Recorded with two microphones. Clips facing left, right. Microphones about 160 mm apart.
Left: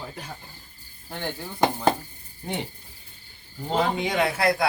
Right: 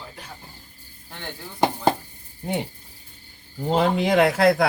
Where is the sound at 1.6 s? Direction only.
5° right (ahead or behind).